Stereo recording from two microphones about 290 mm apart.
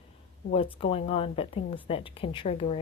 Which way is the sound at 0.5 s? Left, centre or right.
Centre.